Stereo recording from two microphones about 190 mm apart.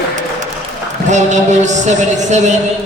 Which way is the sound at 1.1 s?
40° right (ahead or behind).